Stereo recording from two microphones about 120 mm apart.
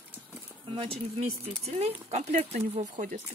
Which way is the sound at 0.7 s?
55° right (ahead or behind).